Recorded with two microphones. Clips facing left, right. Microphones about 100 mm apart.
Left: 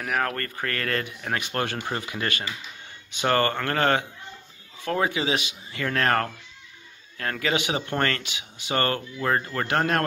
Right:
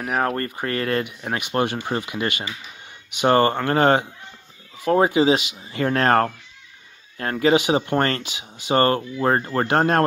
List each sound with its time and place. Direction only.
0.0 s speech: 30° right (ahead or behind)